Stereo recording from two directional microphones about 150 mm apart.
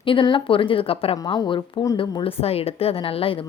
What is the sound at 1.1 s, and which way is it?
A woman's voice, 25° left (ahead or behind).